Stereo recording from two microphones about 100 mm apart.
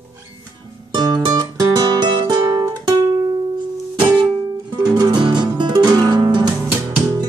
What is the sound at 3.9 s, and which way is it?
Music, 50° right (ahead or behind).